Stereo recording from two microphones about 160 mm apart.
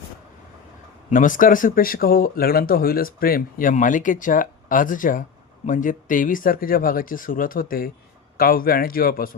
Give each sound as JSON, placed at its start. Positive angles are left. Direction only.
{"t": 1.1, "sound": "speech", "side_deg": 55}